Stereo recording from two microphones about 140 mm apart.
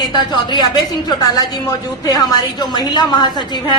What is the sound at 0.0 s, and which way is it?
A woman's voice, 30° left (ahead or behind).